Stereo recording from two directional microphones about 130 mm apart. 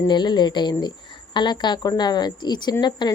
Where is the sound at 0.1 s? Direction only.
35° left (ahead or behind).